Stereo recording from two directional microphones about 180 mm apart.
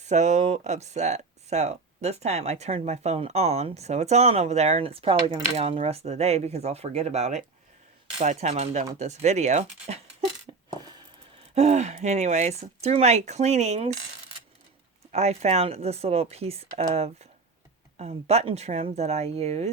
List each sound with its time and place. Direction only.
0.0 s speech: 40° right (ahead or behind)
10.5 s a sound: 30° right (ahead or behind)
11.5 s speech: 40° right (ahead or behind)
15.1 s speech: 40° right (ahead or behind)